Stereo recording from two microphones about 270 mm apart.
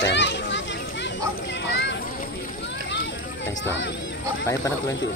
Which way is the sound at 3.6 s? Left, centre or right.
Left.